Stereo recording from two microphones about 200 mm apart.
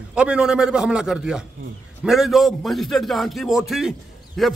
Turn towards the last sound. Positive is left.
turn(degrees=0)  # may be behind; listen again after turning